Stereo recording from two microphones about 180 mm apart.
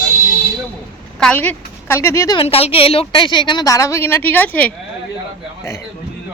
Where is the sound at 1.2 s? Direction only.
5° left (ahead or behind).